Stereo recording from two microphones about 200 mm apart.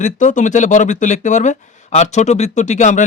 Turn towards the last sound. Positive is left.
turn(degrees=35)  # may be behind; listen again after turning